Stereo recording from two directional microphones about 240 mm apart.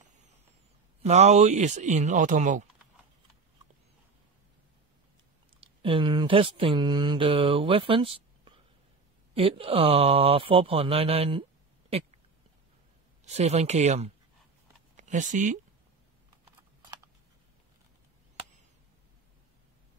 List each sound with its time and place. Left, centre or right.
1.0 s speech: right
5.6 s mantra: right
9.3 s speech: right
13.2 s speech: right
16.4 s computer keyboard: centre